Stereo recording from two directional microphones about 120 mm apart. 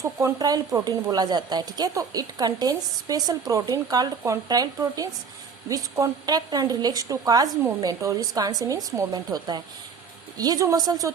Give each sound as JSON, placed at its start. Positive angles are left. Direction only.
{"t": 0.0, "sound": "speech", "side_deg": -25}